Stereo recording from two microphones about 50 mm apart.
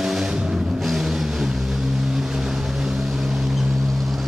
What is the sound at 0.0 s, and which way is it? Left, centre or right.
Vehicle, centre.